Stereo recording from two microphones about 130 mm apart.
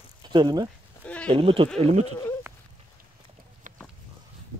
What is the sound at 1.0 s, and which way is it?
Sheep, 10° left (ahead or behind).